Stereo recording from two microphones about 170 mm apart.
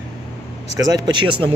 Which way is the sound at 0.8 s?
20° right (ahead or behind).